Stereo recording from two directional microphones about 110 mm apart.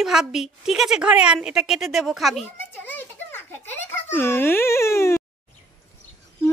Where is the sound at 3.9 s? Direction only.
20° left (ahead or behind).